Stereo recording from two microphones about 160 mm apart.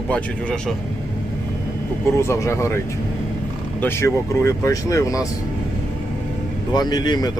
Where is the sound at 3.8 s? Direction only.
15° left (ahead or behind).